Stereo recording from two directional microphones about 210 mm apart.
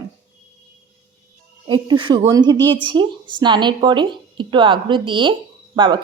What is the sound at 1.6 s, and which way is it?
A woman's voice, 20° right (ahead or behind).